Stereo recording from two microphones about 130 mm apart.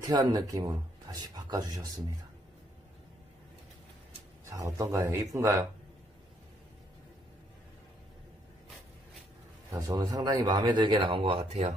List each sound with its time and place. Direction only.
0.0 s speech: 30° right (ahead or behind)
4.5 s speech: 25° right (ahead or behind)
9.7 s speech: 25° right (ahead or behind); by 11.7 s 50° right (ahead or behind)